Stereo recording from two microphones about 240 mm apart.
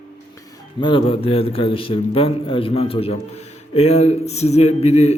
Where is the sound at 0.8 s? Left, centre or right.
Left.